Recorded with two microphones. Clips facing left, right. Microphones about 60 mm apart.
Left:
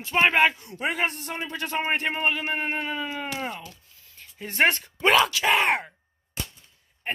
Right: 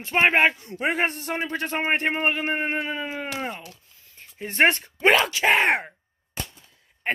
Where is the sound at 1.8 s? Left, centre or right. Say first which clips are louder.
Right 2 dB; right.